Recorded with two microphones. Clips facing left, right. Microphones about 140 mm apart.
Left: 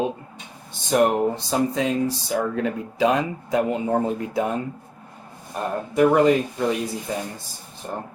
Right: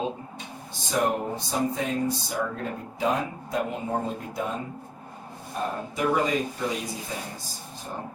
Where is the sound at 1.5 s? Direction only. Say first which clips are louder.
Left 5 dB; 80° left.